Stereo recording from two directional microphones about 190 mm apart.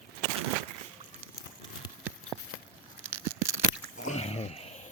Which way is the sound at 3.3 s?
15° right (ahead or behind).